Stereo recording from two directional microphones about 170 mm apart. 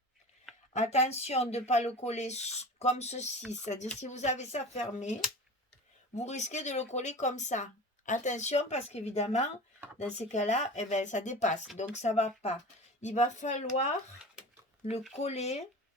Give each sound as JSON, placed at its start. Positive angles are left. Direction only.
{"t": 0.7, "sound": "speech", "side_deg": 40}
{"t": 6.1, "sound": "speech", "side_deg": 40}
{"t": 15.1, "sound": "speech", "side_deg": 40}